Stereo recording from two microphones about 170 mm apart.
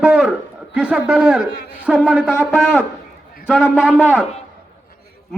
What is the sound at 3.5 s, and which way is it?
Speech, 5° right (ahead or behind).